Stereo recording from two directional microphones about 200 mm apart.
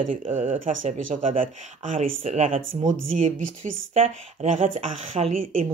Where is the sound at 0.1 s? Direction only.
40° right (ahead or behind).